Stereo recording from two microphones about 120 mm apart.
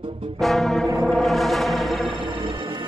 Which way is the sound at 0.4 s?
Centre (ahead or behind).